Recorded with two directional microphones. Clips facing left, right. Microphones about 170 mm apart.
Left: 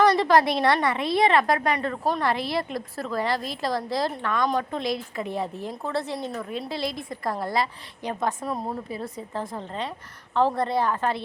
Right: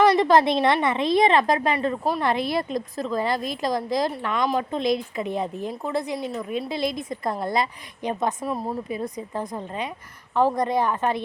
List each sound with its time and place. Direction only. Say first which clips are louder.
0.0 s a woman's voice: right 2 dB; 20° right (ahead or behind)
8.4 s speech: right 2 dB; 5° right (ahead or behind)
8.9 s a woman's voice: right 3 dB; 15° right (ahead or behind)